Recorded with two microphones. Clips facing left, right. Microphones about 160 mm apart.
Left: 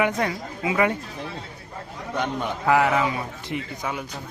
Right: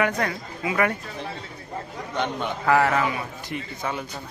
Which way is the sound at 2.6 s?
15° left (ahead or behind).